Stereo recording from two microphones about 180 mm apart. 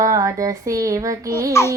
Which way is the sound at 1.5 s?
15° left (ahead or behind).